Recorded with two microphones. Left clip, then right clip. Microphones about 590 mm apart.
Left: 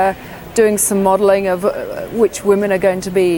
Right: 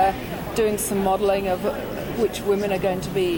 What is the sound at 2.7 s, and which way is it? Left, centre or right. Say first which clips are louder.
Speech: left 9 dB; left.